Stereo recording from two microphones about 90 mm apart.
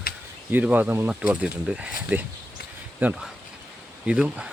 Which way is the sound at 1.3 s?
10° right (ahead or behind).